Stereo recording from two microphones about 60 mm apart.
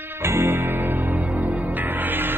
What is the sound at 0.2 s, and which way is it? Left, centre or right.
Music, right.